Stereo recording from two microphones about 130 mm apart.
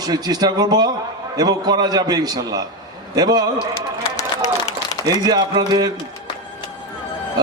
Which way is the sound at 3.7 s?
20° left (ahead or behind).